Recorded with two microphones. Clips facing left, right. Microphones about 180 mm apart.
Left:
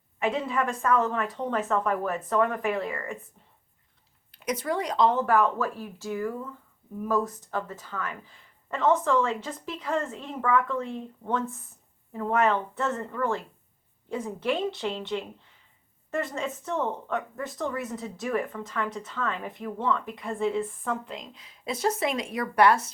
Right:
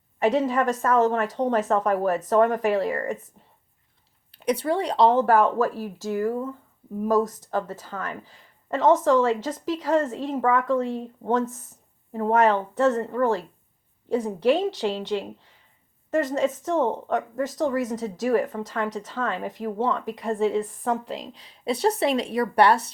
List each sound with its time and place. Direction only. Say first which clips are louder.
0.2 s a woman's voice: right 6 dB; 40° right (ahead or behind)
4.6 s a woman's voice: right 3 dB; 30° right (ahead or behind)